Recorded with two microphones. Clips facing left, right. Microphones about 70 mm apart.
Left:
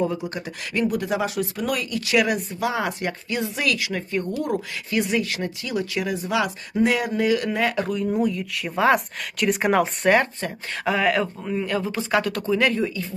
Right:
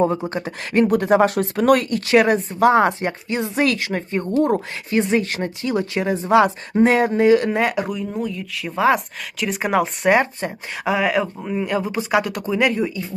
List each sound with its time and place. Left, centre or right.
0.0 s speech: right
8.1 s speech: centre
10.1 s speech: centre